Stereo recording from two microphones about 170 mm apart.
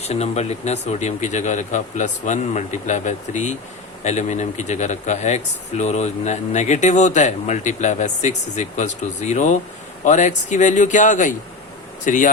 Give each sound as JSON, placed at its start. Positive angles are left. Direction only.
{"t": 0.0, "sound": "speech", "side_deg": 40}